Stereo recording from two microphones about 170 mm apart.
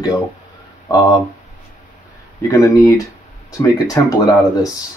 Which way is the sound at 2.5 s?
20° left (ahead or behind).